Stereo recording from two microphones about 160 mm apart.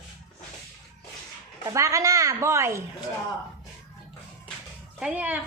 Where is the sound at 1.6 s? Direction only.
20° right (ahead or behind).